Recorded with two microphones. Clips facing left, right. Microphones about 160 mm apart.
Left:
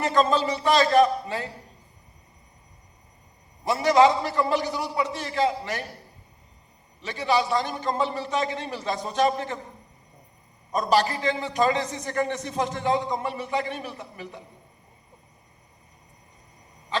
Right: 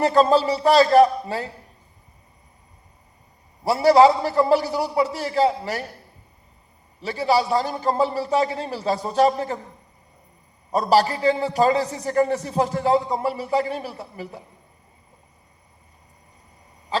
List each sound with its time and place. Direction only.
0.0 s a man's voice: 35° right (ahead or behind)
3.6 s a man's voice: 35° right (ahead or behind)
7.0 s a man's voice: 35° right (ahead or behind)
10.7 s a man's voice: 35° right (ahead or behind)
16.9 s owl: 35° right (ahead or behind)